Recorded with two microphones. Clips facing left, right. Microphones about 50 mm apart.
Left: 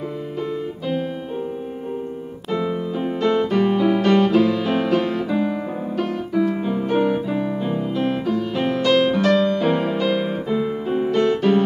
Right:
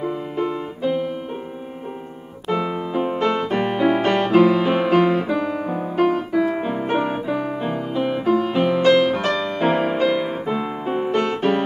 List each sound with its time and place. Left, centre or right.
0.0 s music: right
2.5 s music: right
5.4 s music: right
5.9 s music: right
9.2 s music: centre
9.5 s music: right